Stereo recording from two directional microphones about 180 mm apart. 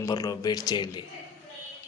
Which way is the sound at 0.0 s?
20° left (ahead or behind).